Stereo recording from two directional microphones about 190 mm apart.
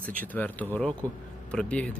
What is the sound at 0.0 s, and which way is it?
Speech, 10° left (ahead or behind).